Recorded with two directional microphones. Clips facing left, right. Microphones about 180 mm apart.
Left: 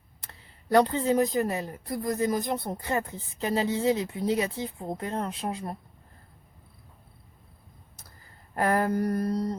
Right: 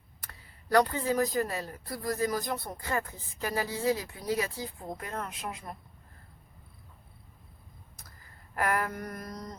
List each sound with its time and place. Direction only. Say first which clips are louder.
0.2 s speech: left 1 dB; 25° left (ahead or behind)
8.5 s mantra: left 6 dB; 30° left (ahead or behind)